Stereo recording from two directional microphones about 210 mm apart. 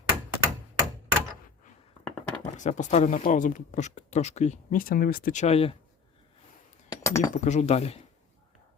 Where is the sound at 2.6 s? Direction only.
35° left (ahead or behind).